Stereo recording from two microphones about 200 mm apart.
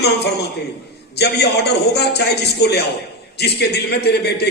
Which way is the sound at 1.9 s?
55° left (ahead or behind).